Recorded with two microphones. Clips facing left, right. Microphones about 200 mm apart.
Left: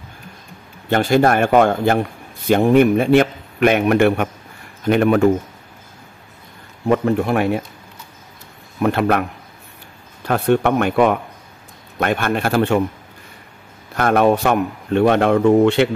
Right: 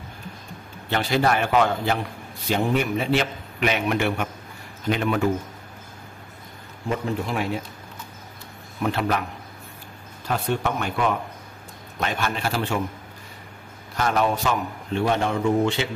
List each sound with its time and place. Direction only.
0.8 s a man's voice: 50° left (ahead or behind)
6.9 s speech: 60° left (ahead or behind)
8.8 s speech: 60° left (ahead or behind)
10.2 s speech: 60° left (ahead or behind)
13.9 s speech: 55° left (ahead or behind)